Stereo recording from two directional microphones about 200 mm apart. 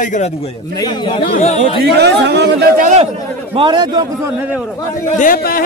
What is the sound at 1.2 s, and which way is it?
Speech, 35° left (ahead or behind).